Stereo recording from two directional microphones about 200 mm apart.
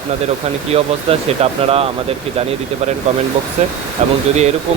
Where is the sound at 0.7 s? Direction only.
30° right (ahead or behind).